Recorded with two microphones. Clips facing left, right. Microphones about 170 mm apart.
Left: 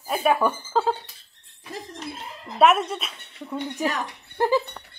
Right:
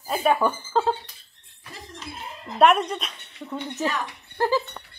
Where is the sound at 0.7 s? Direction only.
5° left (ahead or behind).